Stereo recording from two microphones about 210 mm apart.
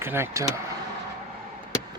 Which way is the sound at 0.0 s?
10° right (ahead or behind).